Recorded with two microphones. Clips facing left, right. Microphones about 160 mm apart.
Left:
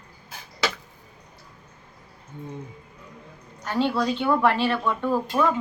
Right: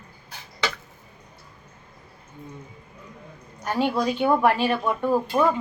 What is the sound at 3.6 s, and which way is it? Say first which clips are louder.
A woman's voice: even; 10° right (ahead or behind).